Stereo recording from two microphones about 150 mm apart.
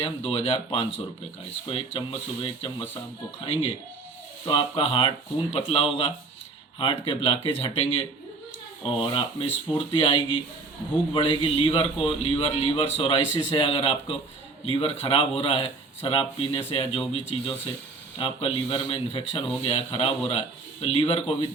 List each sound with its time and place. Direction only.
0.0 s a man's voice: 40° left (ahead or behind)